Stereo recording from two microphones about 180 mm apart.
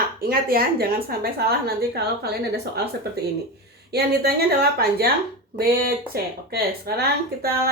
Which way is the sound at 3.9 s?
60° right (ahead or behind).